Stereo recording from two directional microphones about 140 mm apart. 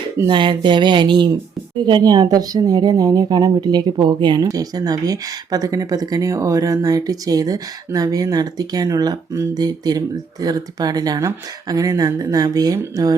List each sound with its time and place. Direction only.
0.3 s speech: 35° right (ahead or behind)